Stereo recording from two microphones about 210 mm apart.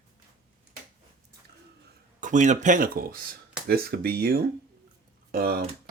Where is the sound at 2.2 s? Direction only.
35° right (ahead or behind).